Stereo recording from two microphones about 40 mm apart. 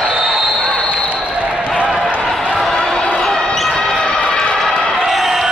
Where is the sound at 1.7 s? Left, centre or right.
Right.